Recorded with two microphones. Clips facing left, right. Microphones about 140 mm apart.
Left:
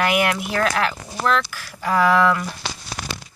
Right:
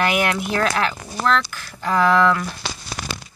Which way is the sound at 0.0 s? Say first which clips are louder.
Even; 5° left (ahead or behind).